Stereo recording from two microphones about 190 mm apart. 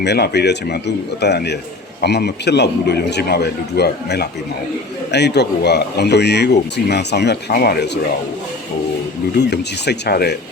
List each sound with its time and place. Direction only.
0.0 s speech: 60° left (ahead or behind)
9.3 s speech: 60° left (ahead or behind)